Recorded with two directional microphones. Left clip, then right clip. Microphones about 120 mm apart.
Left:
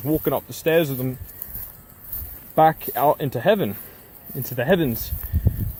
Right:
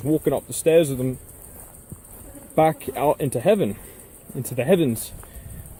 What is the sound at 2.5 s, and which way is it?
Speech, 35° right (ahead or behind).